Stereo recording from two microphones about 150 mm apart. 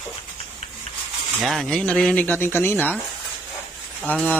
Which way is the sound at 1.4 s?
Centre (ahead or behind).